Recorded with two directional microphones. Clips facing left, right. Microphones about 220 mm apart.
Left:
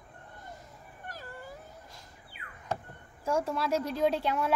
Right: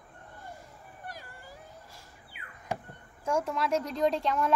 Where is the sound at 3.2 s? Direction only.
5° left (ahead or behind).